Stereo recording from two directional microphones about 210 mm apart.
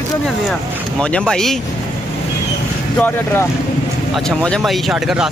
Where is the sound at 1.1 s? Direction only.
5° left (ahead or behind).